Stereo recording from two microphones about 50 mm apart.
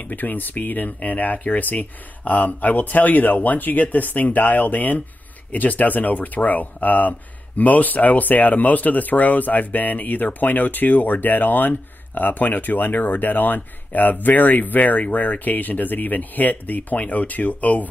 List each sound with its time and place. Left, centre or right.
0.1 s speech: left